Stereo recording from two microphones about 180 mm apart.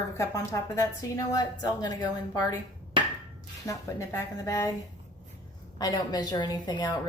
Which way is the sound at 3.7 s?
15° left (ahead or behind).